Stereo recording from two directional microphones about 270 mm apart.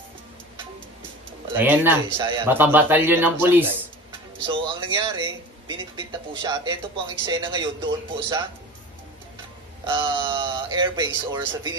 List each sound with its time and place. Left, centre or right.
1.5 s speech: centre
4.4 s speech: centre
9.8 s speech: centre